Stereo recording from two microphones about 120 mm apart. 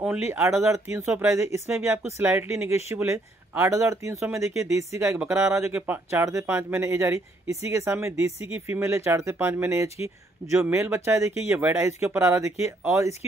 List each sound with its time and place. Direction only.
0.2 s speech: 20° right (ahead or behind)
5.2 s speech: 10° right (ahead or behind)